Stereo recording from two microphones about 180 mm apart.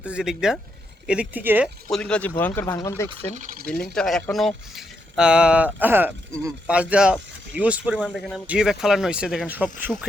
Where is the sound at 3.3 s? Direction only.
45° right (ahead or behind).